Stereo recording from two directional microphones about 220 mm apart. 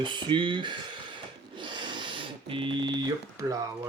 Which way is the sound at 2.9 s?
15° right (ahead or behind).